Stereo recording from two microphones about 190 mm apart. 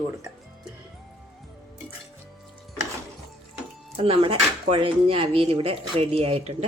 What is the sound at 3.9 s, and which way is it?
Speech, 30° right (ahead or behind).